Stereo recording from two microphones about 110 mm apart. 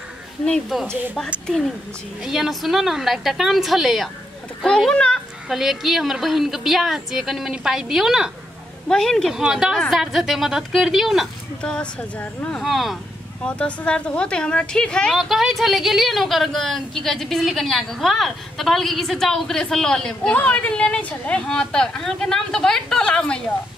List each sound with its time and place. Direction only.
0.5 s speech: 5° left (ahead or behind)
2.2 s a woman's voice: 5° right (ahead or behind); by 12.6 s 15° left (ahead or behind)
12.6 s speech: centre (ahead or behind)
13.4 s a woman's voice: 10° left (ahead or behind)